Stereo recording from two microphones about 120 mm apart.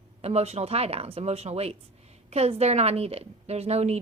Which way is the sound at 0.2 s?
60° right (ahead or behind).